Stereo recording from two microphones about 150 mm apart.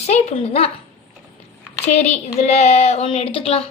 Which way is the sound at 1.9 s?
50° left (ahead or behind).